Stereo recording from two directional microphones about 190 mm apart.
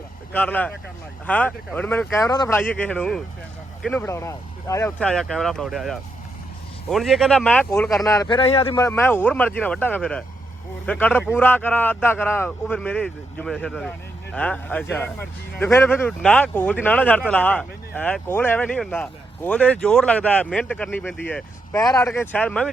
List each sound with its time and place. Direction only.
0.3 s speech: 10° left (ahead or behind); by 8.8 s 30° left (ahead or behind)
8.8 s speech: 10° left (ahead or behind)